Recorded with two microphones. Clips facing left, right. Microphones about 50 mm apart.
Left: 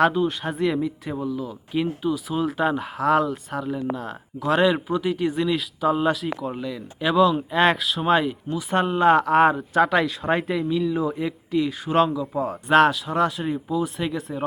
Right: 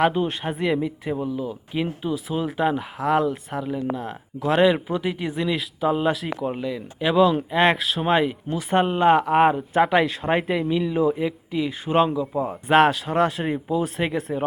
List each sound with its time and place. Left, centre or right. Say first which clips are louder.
0.4 s speech: even; centre
10.7 s speech: even; right
11.0 s speech: right 4 dB; centre
12.6 s speech: even; centre
13.1 s speech: right 1 dB; right